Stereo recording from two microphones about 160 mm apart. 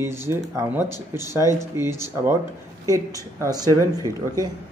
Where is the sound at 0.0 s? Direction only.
15° right (ahead or behind).